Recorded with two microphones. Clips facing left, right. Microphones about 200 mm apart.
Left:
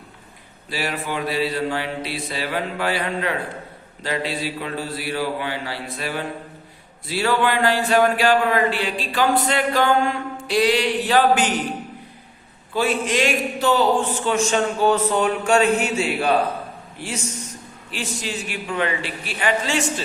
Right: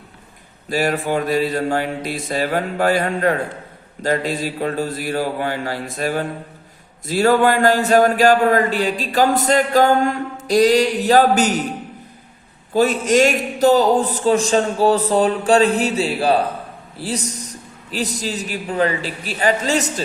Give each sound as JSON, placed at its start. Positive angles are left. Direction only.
{"t": 0.7, "sound": "speech", "side_deg": -45}
{"t": 12.7, "sound": "a man's voice", "side_deg": -40}